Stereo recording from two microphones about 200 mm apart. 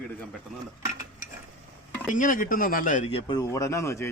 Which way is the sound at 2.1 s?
40° left (ahead or behind).